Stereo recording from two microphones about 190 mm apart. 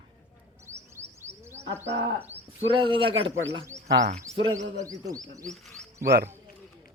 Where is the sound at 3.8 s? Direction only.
65° right (ahead or behind).